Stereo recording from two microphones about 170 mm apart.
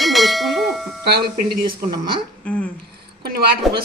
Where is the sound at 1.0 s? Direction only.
65° right (ahead or behind).